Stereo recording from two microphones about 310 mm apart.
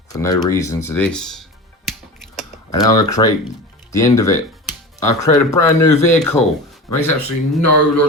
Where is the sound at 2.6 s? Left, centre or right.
Centre.